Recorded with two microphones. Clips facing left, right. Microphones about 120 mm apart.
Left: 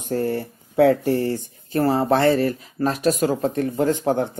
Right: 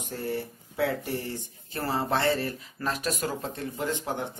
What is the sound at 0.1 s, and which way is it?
Speech, 50° left (ahead or behind).